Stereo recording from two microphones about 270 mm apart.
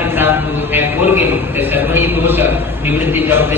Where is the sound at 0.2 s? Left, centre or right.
Centre.